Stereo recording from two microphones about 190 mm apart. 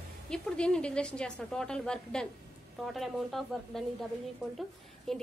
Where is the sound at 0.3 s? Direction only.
5° left (ahead or behind).